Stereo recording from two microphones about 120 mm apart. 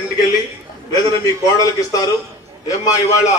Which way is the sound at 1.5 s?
30° left (ahead or behind).